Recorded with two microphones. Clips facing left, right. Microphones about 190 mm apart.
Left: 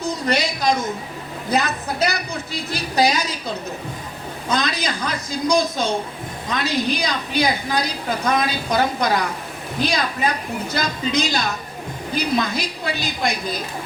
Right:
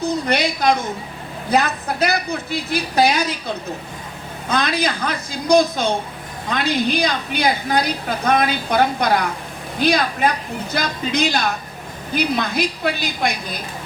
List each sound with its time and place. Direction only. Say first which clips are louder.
0.3 s a woman's voice: right 1 dB; 60° right (ahead or behind)
4.4 s a woman's voice: right 3 dB; 55° right (ahead or behind)